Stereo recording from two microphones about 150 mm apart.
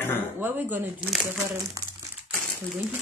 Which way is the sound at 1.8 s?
25° right (ahead or behind).